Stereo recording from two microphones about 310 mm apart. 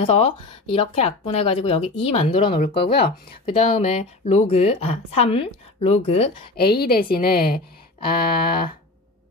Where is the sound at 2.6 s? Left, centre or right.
Left.